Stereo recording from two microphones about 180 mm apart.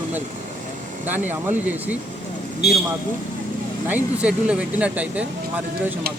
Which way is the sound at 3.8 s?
10° right (ahead or behind).